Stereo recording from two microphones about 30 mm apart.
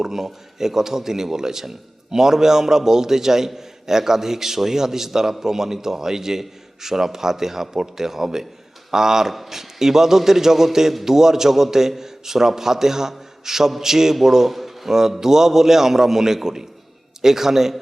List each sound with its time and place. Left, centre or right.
0.0 s a man's voice: centre